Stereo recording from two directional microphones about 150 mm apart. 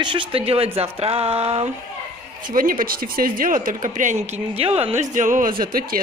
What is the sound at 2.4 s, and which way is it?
A woman's voice, 70° right (ahead or behind).